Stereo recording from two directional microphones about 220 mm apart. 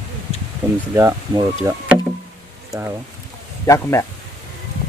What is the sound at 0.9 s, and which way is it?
Speech, 15° right (ahead or behind).